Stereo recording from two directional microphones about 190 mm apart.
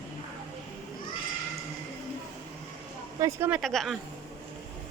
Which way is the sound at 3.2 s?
10° right (ahead or behind).